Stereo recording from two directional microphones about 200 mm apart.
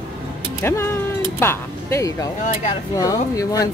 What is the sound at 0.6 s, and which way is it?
Speech, 15° left (ahead or behind).